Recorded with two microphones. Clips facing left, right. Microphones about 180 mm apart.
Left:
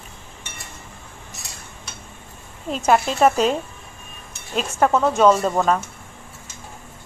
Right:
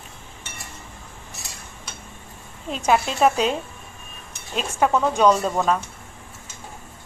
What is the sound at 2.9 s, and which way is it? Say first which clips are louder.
Speech: left 2 dB; centre (ahead or behind).